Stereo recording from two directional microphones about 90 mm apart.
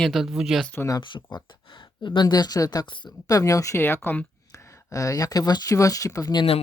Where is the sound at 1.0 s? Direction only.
60° left (ahead or behind); by 2.8 s 45° left (ahead or behind).